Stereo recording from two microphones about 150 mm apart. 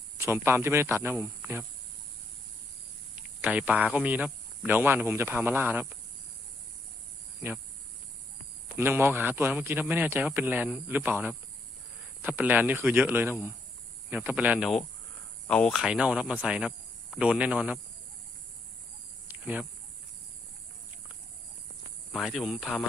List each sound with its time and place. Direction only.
0.2 s a man's voice: 15° right (ahead or behind)
3.4 s a man's voice: 10° right (ahead or behind)
8.7 s a man's voice: 15° right (ahead or behind)
12.4 s a man's voice: 10° right (ahead or behind)
15.4 s speech: 5° left (ahead or behind)
15.8 s a man's voice: 5° right (ahead or behind)
19.3 s cricket: 10° right (ahead or behind)
22.1 s speech: centre (ahead or behind)